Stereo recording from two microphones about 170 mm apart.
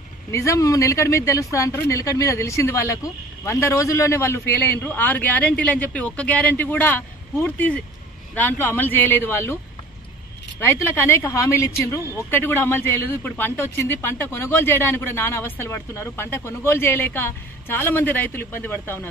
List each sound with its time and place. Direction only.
0.3 s speech: 15° left (ahead or behind)
10.6 s speech: 15° left (ahead or behind)